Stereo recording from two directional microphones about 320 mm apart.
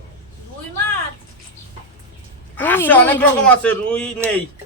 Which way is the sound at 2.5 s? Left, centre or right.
Centre.